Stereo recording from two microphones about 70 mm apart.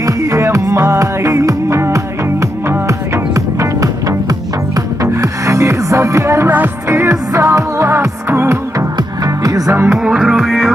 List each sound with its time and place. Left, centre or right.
0.0 s music: right
5.0 s music: right
7.9 s music: right
8.9 s music: right
9.8 s music: centre